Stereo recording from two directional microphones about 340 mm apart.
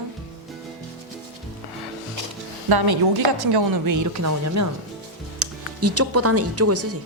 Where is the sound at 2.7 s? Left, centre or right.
Right.